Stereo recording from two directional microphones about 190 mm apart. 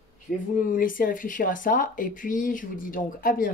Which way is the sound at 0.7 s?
45° left (ahead or behind).